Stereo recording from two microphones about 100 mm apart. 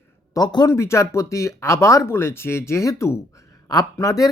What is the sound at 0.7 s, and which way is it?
Speech, 30° left (ahead or behind).